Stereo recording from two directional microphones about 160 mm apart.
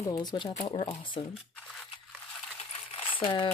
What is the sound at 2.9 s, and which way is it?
Coin, 35° left (ahead or behind).